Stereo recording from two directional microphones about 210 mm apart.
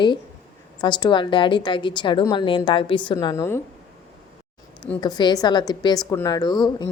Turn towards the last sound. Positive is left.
turn(degrees=20)  # may be behind; listen again after turning